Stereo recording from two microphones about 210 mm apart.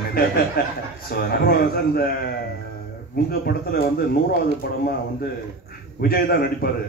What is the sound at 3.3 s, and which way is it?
Speech, 45° left (ahead or behind).